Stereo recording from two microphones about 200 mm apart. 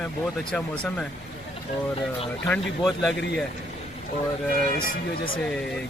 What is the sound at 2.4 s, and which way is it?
Speech, centre (ahead or behind).